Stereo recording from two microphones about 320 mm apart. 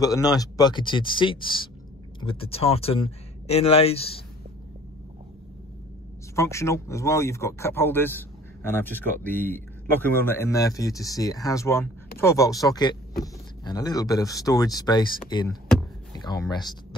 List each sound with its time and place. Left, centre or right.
0.0 s speech: centre
6.3 s speech: centre